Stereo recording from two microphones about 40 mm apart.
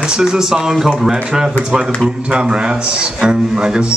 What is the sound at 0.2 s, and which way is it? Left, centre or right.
A man's voice, centre.